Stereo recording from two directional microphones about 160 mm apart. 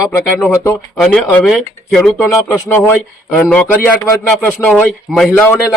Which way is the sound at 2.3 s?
15° left (ahead or behind).